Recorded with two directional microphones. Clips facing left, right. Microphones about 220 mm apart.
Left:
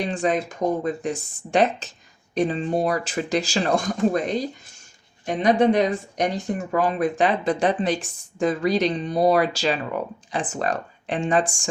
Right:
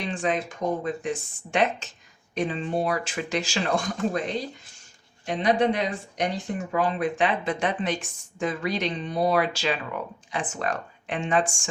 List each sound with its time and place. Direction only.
0.0 s speech: 40° left (ahead or behind)